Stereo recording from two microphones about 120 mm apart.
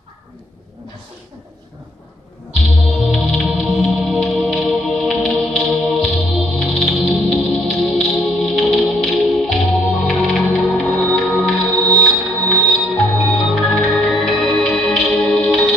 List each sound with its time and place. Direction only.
3.1 s music: 5° left (ahead or behind)